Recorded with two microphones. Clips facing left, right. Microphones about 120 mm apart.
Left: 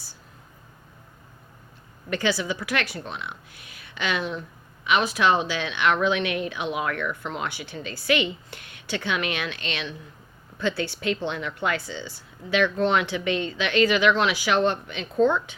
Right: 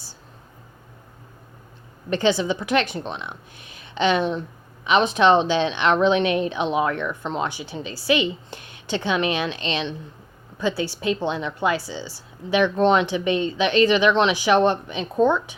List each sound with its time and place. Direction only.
2.0 s speech: 20° right (ahead or behind)
10.6 s a woman's voice: 15° right (ahead or behind)